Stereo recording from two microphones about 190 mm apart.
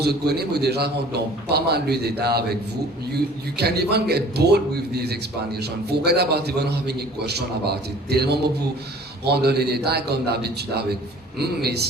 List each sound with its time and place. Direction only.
0.0 s a man's voice: 60° right (ahead or behind)
3.6 s a man's voice: 60° right (ahead or behind)